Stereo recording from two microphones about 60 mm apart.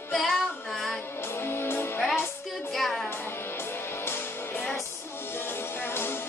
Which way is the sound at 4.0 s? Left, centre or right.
Left.